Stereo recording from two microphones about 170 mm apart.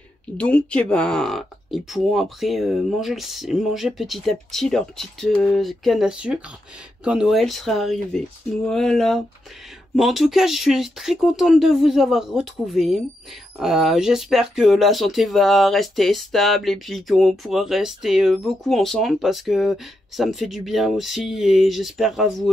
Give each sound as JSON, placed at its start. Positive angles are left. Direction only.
{"t": 0.4, "sound": "speech", "side_deg": 5}